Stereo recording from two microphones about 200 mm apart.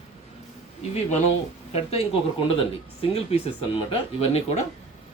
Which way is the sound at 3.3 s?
30° left (ahead or behind).